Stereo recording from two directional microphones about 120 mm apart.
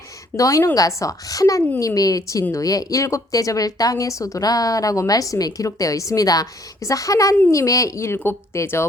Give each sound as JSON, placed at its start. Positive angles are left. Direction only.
{"t": 0.3, "sound": "speech", "side_deg": 25}